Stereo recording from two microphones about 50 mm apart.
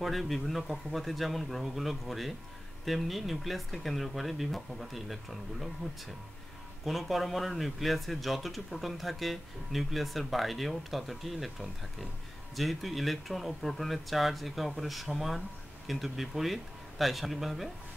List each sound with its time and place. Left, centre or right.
0.0 s speech: centre
6.8 s speech: centre